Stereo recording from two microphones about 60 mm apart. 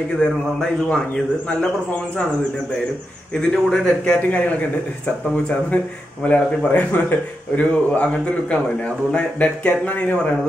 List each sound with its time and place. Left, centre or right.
0.2 s a man's voice: centre
3.3 s speech: centre
6.2 s speech: left